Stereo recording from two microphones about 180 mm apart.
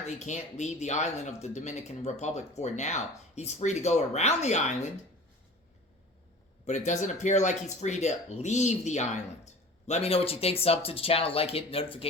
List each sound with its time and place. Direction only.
0.0 s speech: 40° left (ahead or behind)
6.7 s speech: 40° left (ahead or behind)